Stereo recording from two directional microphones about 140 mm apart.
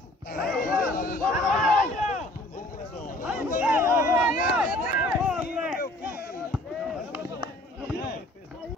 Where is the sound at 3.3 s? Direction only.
10° right (ahead or behind).